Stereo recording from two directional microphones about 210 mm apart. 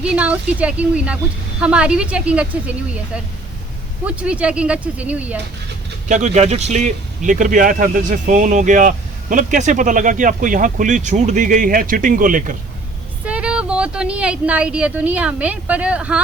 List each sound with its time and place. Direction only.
0.0 s a woman's voice: 5° right (ahead or behind)
4.0 s a woman's voice: 5° right (ahead or behind)
6.1 s speech: 35° right (ahead or behind)
13.2 s a woman's voice: 5° right (ahead or behind)